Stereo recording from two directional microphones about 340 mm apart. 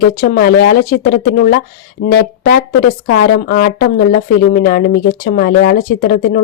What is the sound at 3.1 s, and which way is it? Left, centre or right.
A woman's voice, left.